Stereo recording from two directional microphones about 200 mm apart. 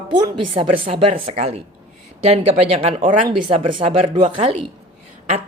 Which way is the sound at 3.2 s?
25° right (ahead or behind).